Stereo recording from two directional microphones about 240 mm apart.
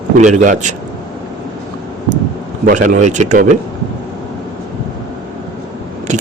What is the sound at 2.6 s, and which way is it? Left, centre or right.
Speech, right.